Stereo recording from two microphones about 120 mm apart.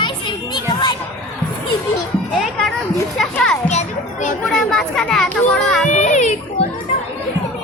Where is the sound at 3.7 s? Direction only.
80° left.